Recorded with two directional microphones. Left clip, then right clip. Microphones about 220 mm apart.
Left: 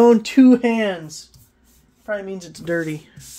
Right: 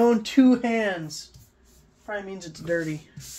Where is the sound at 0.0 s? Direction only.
55° left (ahead or behind).